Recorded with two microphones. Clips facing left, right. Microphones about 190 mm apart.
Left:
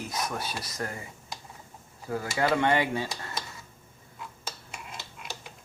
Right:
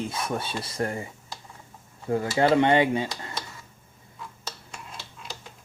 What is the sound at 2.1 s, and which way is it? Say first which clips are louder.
Speech: right 5 dB; 25° right (ahead or behind).